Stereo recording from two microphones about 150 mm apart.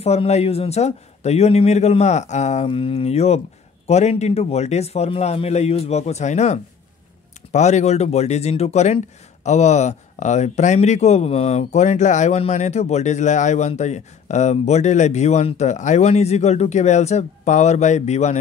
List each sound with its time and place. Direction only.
0.0 s speech: 45° left (ahead or behind)